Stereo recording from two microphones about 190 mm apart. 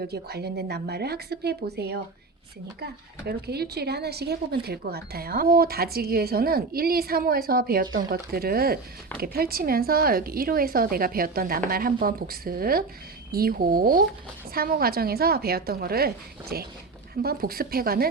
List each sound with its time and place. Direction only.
0.0 s a woman's voice: 55° right (ahead or behind)